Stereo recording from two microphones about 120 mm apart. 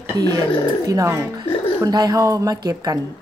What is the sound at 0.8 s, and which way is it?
A woman's voice, 25° right (ahead or behind).